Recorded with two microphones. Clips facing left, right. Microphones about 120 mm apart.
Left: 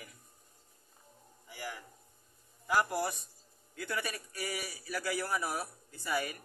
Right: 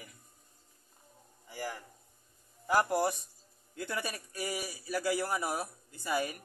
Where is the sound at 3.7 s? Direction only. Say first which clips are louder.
Right 1 dB; 25° right (ahead or behind).